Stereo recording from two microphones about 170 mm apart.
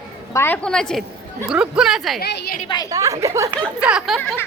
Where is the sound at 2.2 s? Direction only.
70° left (ahead or behind).